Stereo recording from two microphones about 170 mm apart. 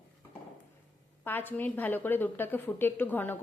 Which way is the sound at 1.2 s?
10° left (ahead or behind).